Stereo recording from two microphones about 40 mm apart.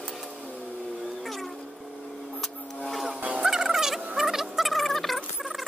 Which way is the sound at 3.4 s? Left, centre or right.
Centre.